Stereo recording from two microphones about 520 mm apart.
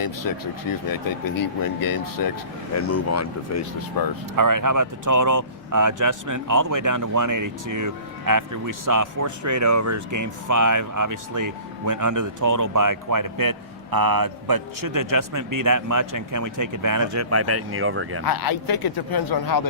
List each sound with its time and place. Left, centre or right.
0.0 s speech: left
2.8 s speech: left
4.4 s speech: right
18.3 s speech: left